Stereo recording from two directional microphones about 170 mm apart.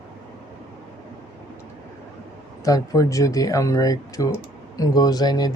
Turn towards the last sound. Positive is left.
turn(degrees=25)  # may be behind; listen again after turning